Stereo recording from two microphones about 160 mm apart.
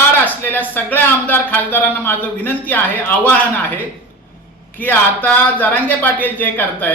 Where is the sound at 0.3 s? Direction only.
10° left (ahead or behind).